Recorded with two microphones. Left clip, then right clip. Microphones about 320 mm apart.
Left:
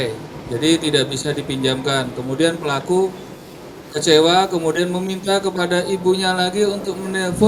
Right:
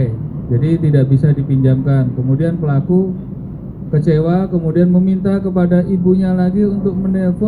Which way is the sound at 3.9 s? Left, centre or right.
Left.